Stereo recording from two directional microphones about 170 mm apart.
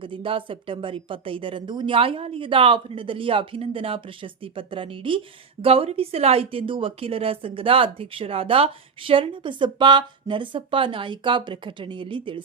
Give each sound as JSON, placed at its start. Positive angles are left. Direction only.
{"t": 0.0, "sound": "a woman's voice", "side_deg": -30}